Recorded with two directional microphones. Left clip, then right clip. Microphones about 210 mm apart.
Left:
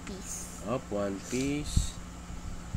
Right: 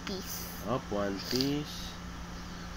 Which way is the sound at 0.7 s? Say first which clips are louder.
Left 1 dB; 20° left (ahead or behind).